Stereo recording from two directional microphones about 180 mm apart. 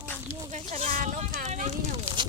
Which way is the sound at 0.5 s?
35° right (ahead or behind).